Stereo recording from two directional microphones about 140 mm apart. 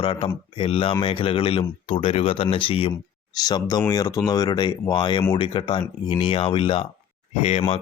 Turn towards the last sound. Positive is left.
turn(degrees=50)  # may be behind; listen again after turning